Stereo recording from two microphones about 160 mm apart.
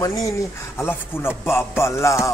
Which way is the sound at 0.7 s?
15° left (ahead or behind).